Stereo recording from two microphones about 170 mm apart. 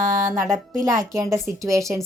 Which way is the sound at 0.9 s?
20° right (ahead or behind).